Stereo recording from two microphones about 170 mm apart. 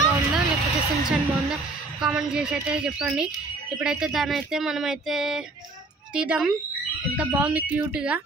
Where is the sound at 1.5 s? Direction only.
5° right (ahead or behind).